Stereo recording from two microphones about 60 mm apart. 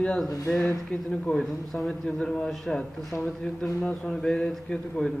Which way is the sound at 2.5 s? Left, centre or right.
Centre.